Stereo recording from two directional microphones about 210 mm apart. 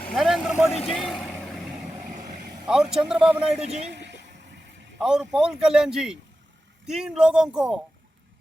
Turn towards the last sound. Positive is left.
turn(degrees=-5)  # may be behind; listen again after turning